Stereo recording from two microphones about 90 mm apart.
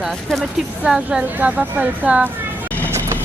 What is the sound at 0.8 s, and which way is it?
Speech, 15° right (ahead or behind).